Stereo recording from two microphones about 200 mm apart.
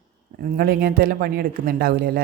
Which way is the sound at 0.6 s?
50° right (ahead or behind).